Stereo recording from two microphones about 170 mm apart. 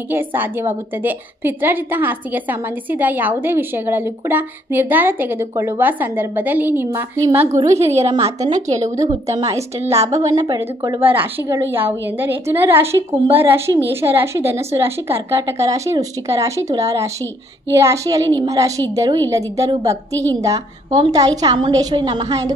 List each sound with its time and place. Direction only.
0.1 s a woman's voice: 10° right (ahead or behind)